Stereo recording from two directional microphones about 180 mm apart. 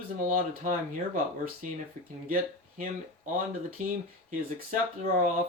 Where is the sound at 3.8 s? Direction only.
45° right (ahead or behind).